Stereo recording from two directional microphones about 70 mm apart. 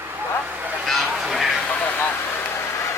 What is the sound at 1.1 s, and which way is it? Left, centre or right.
Speech, centre.